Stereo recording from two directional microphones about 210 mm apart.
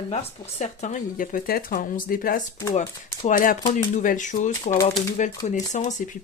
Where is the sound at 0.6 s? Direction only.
35° left (ahead or behind).